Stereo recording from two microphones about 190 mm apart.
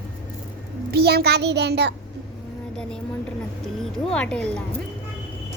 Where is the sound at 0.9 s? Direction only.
55° right (ahead or behind).